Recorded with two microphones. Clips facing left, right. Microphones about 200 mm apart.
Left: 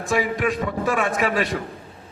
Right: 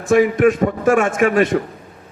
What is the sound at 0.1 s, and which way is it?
A man's voice, 50° right (ahead or behind).